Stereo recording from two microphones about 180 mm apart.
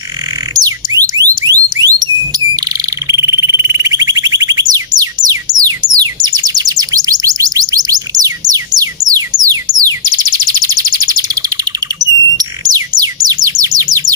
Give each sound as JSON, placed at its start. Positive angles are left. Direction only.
{"t": 0.5, "sound": "alarm", "side_deg": -20}
{"t": 3.1, "sound": "a sound", "side_deg": -15}
{"t": 6.2, "sound": "bird", "side_deg": -20}